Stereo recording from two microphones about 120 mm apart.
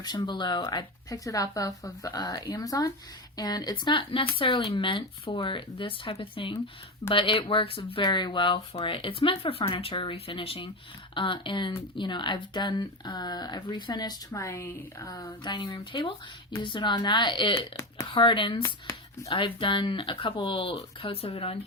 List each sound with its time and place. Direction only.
0.0 s speech: 35° left (ahead or behind)
15.0 s speech: 35° left (ahead or behind)
18.6 s speech: 25° left (ahead or behind)
19.3 s speech: 45° left (ahead or behind)